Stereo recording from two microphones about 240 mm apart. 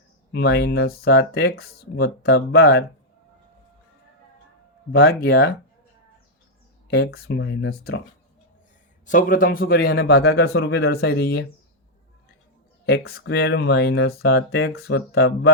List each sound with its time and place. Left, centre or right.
0.3 s speech: left
4.9 s speech: left
6.9 s speech: left
9.0 s speech: left
12.8 s speech: left